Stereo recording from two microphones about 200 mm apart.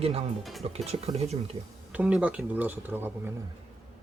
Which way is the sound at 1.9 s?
5° right (ahead or behind).